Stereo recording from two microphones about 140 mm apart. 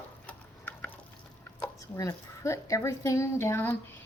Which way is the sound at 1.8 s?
25° left (ahead or behind).